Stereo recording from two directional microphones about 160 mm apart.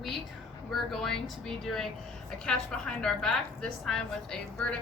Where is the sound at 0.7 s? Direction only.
Centre (ahead or behind).